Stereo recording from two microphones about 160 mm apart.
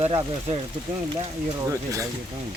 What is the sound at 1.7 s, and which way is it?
Speech, 20° right (ahead or behind).